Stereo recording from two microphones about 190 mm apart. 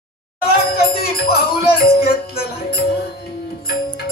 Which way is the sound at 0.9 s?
55° left (ahead or behind).